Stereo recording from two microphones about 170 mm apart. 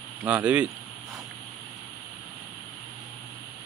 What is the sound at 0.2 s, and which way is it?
Speech, 10° right (ahead or behind).